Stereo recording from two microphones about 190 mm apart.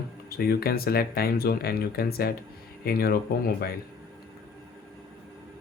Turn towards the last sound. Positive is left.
turn(degrees=55)  # may be behind; listen again after turning